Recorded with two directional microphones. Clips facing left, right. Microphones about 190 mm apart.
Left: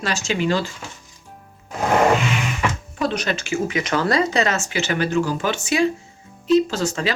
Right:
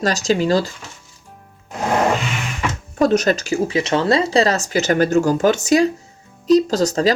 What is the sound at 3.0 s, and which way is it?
Speech, 45° right (ahead or behind).